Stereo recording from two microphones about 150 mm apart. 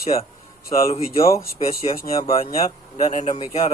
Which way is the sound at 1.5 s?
40° left (ahead or behind).